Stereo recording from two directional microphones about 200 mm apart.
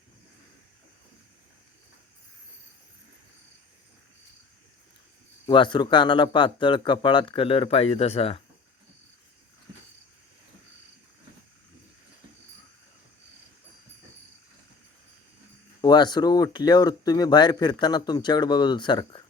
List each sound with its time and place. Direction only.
5.5 s speech: 25° left (ahead or behind)
15.8 s speech: 20° left (ahead or behind)